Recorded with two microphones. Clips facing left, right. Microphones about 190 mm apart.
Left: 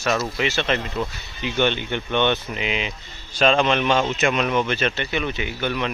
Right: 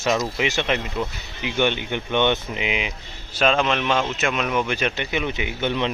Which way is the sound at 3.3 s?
5° right (ahead or behind).